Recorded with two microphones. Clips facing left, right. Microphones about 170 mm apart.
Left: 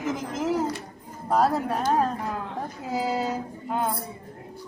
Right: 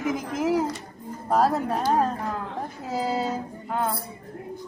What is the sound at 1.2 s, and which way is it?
Speech, centre (ahead or behind).